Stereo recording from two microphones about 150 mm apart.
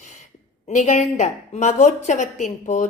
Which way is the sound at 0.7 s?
50° left (ahead or behind).